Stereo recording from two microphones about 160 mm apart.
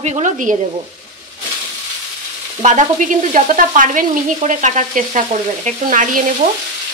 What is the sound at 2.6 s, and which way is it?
Speech, 50° right (ahead or behind).